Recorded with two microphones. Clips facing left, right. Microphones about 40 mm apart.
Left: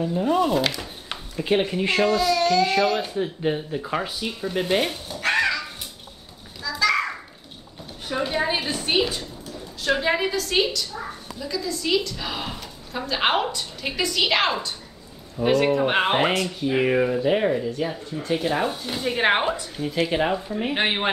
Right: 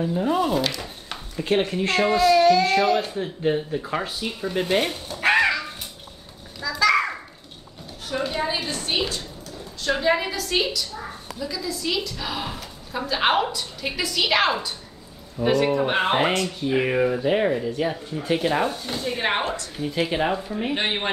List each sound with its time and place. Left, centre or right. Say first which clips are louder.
0.0 s a woman's voice: left 1 dB; centre
2.0 s a woman's voice: right 7 dB; centre
5.2 s crow: right 3 dB; centre
6.6 s a sound: right 2 dB; centre
8.1 s a sound: left 1 dB; centre
8.5 s a woman's voice: left 3 dB; centre
18.6 s speech: right 1 dB; centre
19.0 s speech: left 4 dB; left
19.4 s speech: left 2 dB; centre
19.8 s a woman's voice: even; centre
20.7 s speech: left 3 dB; left